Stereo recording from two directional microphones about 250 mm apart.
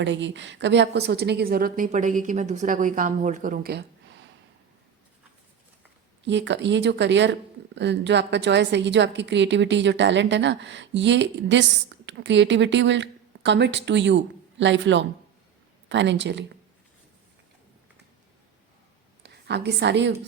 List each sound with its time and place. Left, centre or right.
0.0 s a woman's voice: right
6.2 s a woman's voice: right
19.2 s a woman's voice: right